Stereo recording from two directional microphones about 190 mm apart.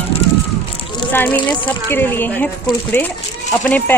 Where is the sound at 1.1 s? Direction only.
10° left (ahead or behind).